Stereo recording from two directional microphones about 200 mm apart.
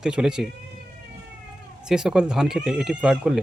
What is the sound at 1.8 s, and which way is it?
Speech, 5° right (ahead or behind).